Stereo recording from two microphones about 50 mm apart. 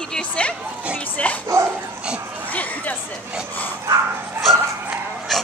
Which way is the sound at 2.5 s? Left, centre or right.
Left.